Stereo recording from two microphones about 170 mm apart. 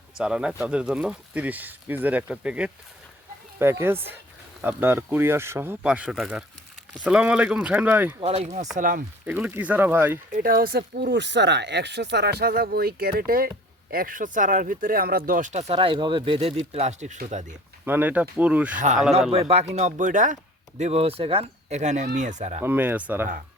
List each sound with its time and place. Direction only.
0.2 s speech: 5° right (ahead or behind)
8.2 s speech: 35° right (ahead or behind)
8.7 s speech: 55° right (ahead or behind)
9.2 s speech: 10° right (ahead or behind)
10.3 s speech: 60° right (ahead or behind)
17.8 s speech: 10° right (ahead or behind)
18.7 s speech: 50° right (ahead or behind)
19.3 s speech: 35° right (ahead or behind)
22.6 s speech: 10° right (ahead or behind)